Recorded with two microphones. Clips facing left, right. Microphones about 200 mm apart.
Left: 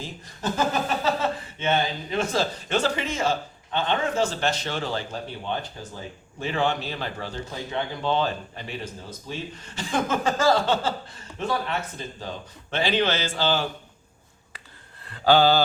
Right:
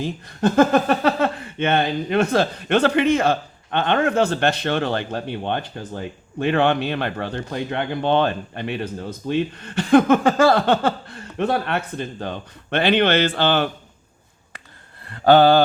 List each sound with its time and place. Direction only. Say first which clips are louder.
0.0 s speech: right 10 dB; 60° right (ahead or behind)
15.1 s speech: right 6 dB; 55° right (ahead or behind)